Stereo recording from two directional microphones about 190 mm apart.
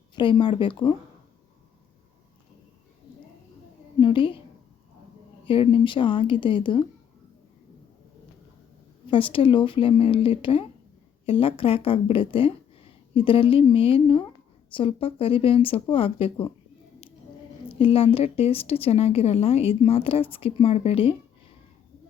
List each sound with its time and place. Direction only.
0.2 s speech: 25° left (ahead or behind)
4.0 s a woman's voice: 25° left (ahead or behind)
5.5 s speech: 25° left (ahead or behind)
9.0 s speech: 25° left (ahead or behind)
17.7 s a woman's voice: 30° left (ahead or behind)